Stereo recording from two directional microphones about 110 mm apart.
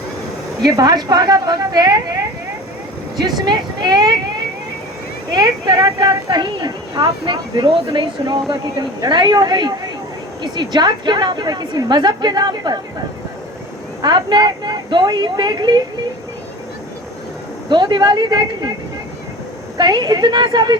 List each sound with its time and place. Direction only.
0.6 s speech: 35° right (ahead or behind)
3.4 s speech: 40° right (ahead or behind)
5.3 s speech: 40° right (ahead or behind)
14.0 s speech: 40° right (ahead or behind)
17.7 s speech: 45° right (ahead or behind)
19.7 s speech: 40° right (ahead or behind)